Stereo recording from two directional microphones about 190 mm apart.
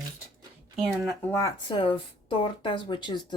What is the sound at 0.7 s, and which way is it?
Speech, centre (ahead or behind).